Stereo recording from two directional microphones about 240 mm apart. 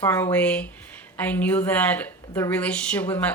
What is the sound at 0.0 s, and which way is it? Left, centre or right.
Speech, centre.